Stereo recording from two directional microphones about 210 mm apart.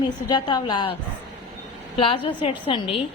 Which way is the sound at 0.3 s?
20° left (ahead or behind).